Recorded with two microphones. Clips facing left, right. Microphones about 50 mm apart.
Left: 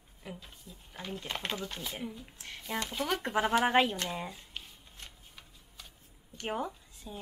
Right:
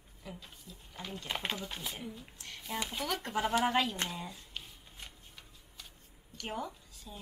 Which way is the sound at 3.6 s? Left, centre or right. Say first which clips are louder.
Left 4 dB; left.